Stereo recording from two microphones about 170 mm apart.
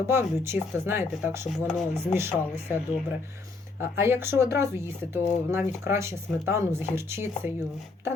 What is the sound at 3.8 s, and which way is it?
Speech, 15° right (ahead or behind).